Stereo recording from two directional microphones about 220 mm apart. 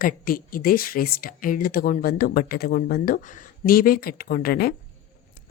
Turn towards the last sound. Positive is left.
turn(degrees=45)  # may be behind; listen again after turning